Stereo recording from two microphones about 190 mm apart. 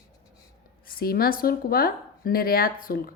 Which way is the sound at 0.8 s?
50° left (ahead or behind).